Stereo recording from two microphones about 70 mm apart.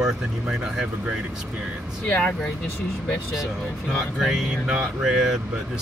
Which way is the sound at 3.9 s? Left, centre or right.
Centre.